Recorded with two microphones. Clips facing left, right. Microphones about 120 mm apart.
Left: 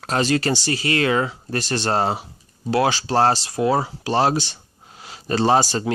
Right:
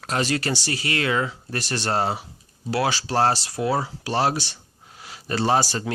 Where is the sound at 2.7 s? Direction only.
25° left (ahead or behind).